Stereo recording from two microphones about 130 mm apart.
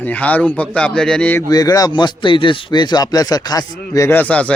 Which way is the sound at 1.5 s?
30° left (ahead or behind).